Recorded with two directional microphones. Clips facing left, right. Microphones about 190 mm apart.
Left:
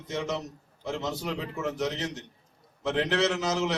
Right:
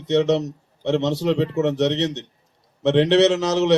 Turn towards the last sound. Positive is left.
turn(degrees=-70)  # may be behind; listen again after turning